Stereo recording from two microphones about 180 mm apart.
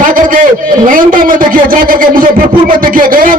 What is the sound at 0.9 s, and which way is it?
A man's voice, 50° right (ahead or behind).